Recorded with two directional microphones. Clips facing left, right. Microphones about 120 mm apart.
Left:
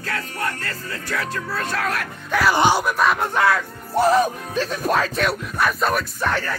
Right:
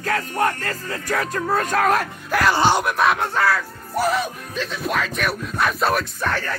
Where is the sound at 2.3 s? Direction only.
Centre (ahead or behind).